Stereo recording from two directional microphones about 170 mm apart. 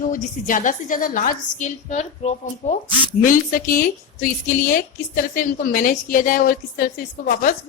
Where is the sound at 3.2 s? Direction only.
55° left (ahead or behind).